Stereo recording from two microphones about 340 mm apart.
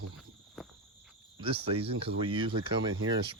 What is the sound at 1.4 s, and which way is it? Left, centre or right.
Speech, centre.